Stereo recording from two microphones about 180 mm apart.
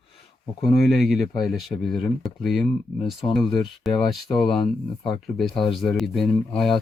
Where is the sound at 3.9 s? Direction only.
25° left (ahead or behind).